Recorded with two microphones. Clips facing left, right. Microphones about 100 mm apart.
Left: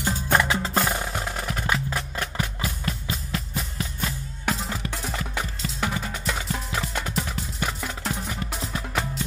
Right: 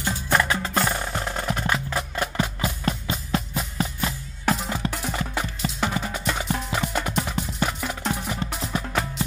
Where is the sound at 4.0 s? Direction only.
5° right (ahead or behind).